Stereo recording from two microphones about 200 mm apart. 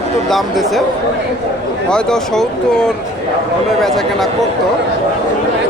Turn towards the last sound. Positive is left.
turn(degrees=0)  # may be behind; listen again after turning